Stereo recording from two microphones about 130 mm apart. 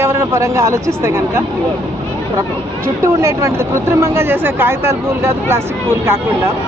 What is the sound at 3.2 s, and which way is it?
Speech, 20° right (ahead or behind).